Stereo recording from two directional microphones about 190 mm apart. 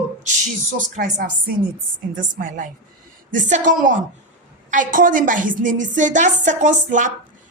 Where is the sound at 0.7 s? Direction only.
45° right (ahead or behind).